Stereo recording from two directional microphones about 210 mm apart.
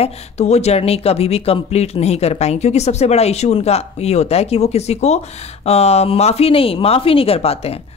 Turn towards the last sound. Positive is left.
turn(degrees=30)  # may be behind; listen again after turning